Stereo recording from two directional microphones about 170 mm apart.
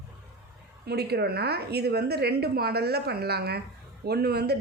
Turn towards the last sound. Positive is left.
turn(degrees=-70)  # may be behind; listen again after turning